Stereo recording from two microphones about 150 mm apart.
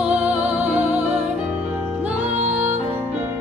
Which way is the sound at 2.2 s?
50° right (ahead or behind).